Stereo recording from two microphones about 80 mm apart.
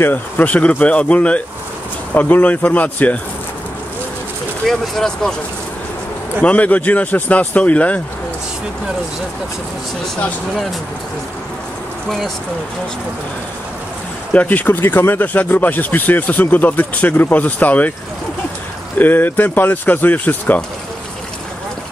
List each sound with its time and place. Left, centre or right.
0.0 s speech: left
4.6 s speech: centre
6.4 s speech: centre
14.3 s speech: centre
18.9 s speech: left